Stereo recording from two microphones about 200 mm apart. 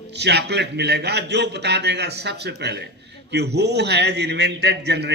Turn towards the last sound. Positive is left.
turn(degrees=-55)  # may be behind; listen again after turning